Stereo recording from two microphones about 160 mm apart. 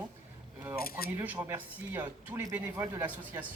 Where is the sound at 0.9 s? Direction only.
70° left (ahead or behind).